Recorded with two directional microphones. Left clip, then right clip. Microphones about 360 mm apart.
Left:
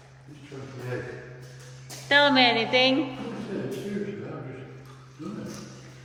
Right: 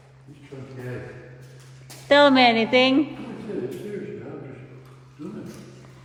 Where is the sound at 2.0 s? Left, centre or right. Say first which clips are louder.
Right 4 dB; centre.